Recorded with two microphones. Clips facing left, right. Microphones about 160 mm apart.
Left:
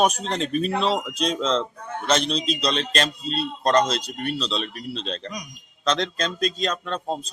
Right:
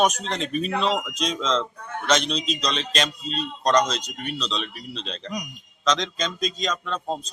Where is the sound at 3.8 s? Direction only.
5° left (ahead or behind).